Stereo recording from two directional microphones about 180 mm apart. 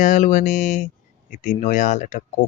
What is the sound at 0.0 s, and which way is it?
Speech, 45° left (ahead or behind).